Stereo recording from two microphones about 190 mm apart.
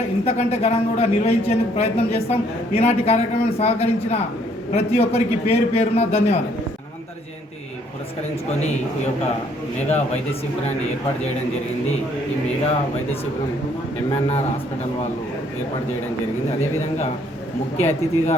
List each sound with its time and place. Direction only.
0.3 s a man's voice: 35° left (ahead or behind)
17.7 s a man's voice: 35° left (ahead or behind)